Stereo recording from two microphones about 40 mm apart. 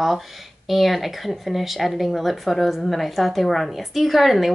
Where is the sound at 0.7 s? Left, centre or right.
Centre.